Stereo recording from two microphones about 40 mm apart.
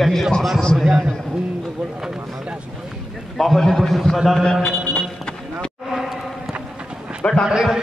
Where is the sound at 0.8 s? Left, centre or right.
Centre.